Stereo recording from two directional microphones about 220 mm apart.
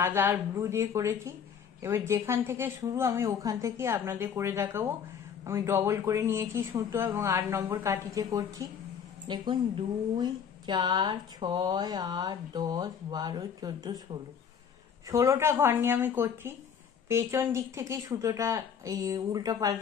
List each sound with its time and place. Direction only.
0.0 s a woman's voice: 10° right (ahead or behind)
15.0 s speech: 15° right (ahead or behind)